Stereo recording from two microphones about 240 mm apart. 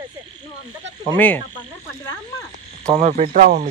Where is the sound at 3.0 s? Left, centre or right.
Right.